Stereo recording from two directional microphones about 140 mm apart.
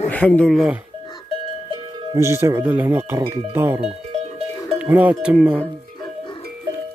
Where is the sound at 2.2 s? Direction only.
20° right (ahead or behind).